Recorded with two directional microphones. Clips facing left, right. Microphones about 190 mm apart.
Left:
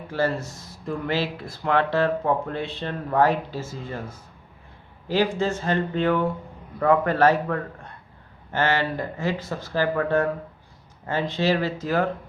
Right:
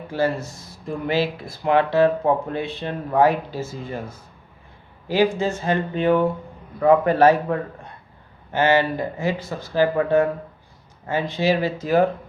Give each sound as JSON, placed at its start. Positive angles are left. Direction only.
{"t": 0.1, "sound": "speech", "side_deg": -10}
{"t": 5.0, "sound": "speech", "side_deg": -10}